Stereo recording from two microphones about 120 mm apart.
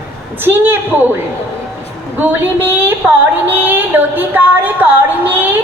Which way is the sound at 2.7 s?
15° right (ahead or behind).